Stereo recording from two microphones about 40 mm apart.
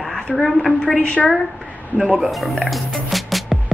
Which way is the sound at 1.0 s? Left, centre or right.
Left.